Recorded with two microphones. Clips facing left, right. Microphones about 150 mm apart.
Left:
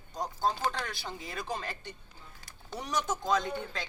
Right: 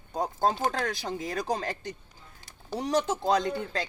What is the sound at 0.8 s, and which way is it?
Speech, 40° right (ahead or behind).